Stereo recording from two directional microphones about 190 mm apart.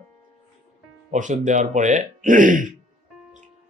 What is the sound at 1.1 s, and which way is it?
Speech, 40° right (ahead or behind).